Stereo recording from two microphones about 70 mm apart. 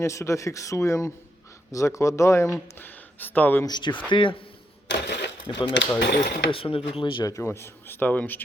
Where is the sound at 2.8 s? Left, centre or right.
Left.